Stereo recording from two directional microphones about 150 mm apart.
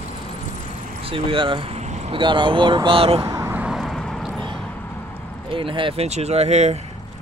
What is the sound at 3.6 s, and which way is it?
Vehicle, centre (ahead or behind).